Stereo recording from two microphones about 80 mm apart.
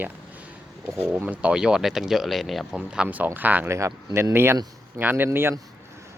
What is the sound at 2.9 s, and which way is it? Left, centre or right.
Speech, centre.